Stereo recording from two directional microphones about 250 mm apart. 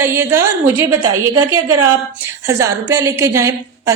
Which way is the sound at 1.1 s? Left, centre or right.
Right.